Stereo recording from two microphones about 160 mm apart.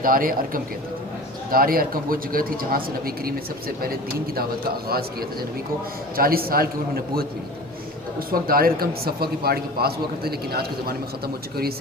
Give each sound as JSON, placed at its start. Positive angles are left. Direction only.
{"t": 0.0, "sound": "a man's voice", "side_deg": -60}
{"t": 6.1, "sound": "a man's voice", "side_deg": -65}
{"t": 8.3, "sound": "a man's voice", "side_deg": -65}